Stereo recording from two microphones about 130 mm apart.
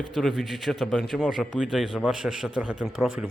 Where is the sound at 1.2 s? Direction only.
5° right (ahead or behind).